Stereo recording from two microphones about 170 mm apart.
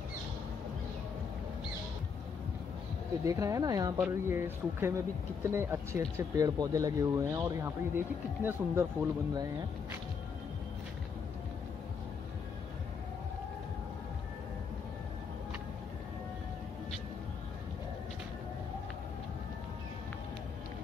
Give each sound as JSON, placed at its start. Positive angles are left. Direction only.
{"t": 3.3, "sound": "speech", "side_deg": -20}